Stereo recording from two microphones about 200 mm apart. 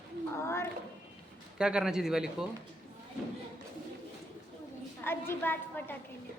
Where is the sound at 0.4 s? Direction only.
15° left (ahead or behind).